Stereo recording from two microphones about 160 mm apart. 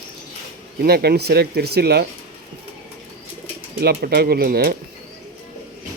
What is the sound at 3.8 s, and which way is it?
Speech, 85° right.